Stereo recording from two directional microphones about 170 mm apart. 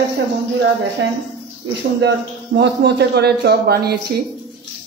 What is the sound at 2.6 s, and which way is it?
A man's voice, 85° right.